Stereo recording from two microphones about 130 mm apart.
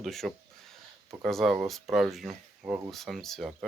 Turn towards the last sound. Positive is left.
turn(degrees=0)  # may be behind; listen again after turning